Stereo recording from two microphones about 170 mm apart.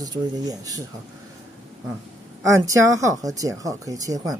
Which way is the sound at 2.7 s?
20° right (ahead or behind).